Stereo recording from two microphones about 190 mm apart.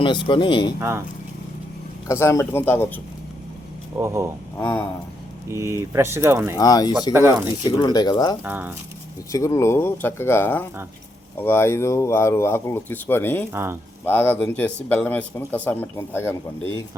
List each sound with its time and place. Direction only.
0.0 s speech: 25° left (ahead or behind)
0.8 s speech: 15° right (ahead or behind)
2.0 s a man's voice: 15° left (ahead or behind)
3.9 s speech: 15° right (ahead or behind)
4.5 s a man's voice: 10° left (ahead or behind)
5.5 s speech: 15° right (ahead or behind)
6.6 s speech: 20° left (ahead or behind)
7.1 s speech: 10° right (ahead or behind)
7.6 s speech: 20° left (ahead or behind)
8.4 s speech: 10° right (ahead or behind)
9.3 s a man's voice: 15° left (ahead or behind)
13.5 s speech: 10° right (ahead or behind)
14.0 s a man's voice: 10° left (ahead or behind)